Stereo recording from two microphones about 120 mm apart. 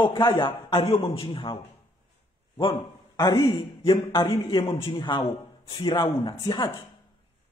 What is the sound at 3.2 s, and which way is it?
Speech, 35° left (ahead or behind).